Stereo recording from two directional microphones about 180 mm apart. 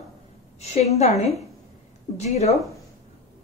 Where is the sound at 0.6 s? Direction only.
35° left (ahead or behind).